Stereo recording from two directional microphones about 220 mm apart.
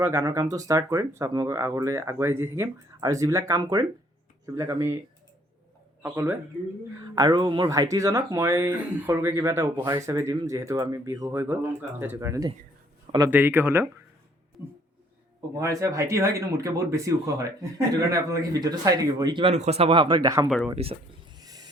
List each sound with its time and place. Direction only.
0.0 s speech: 15° right (ahead or behind)
6.0 s speech: 10° right (ahead or behind)
15.5 s speech: 15° right (ahead or behind)
20.7 s a sound: 25° right (ahead or behind)